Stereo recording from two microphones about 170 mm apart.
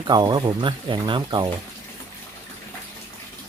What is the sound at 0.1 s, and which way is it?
Speech, 25° right (ahead or behind).